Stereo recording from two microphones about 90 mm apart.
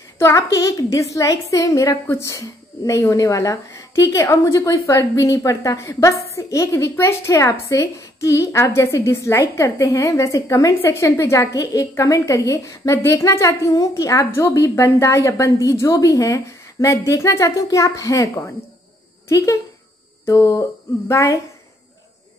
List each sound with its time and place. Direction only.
0.2 s a woman's voice: 35° left (ahead or behind)